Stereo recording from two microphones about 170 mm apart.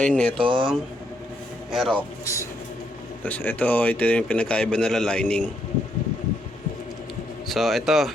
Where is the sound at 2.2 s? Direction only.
15° left (ahead or behind).